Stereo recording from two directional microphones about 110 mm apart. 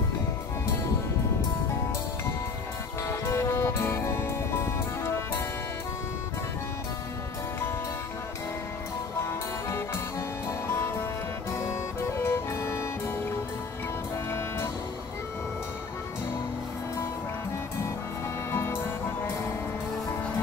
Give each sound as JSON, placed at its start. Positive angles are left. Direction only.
{"t": 3.3, "sound": "music", "side_deg": 25}
{"t": 12.3, "sound": "music", "side_deg": 20}
{"t": 18.5, "sound": "music", "side_deg": 20}